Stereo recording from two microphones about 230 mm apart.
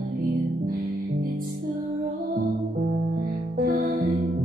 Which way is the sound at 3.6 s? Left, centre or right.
Right.